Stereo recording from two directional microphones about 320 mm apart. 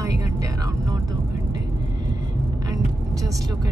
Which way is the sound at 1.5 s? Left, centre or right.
Centre.